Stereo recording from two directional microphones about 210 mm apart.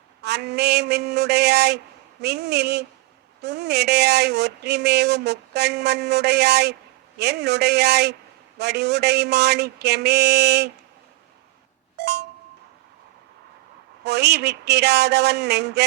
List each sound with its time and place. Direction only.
0.2 s speech: 50° right (ahead or behind)
11.9 s a sound: 50° right (ahead or behind)
14.0 s speech: 55° right (ahead or behind)